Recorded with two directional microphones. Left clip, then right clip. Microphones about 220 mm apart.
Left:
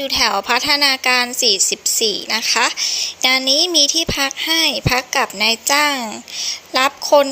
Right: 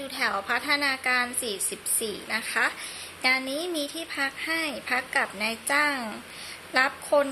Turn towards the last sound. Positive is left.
turn(degrees=30)  # may be behind; listen again after turning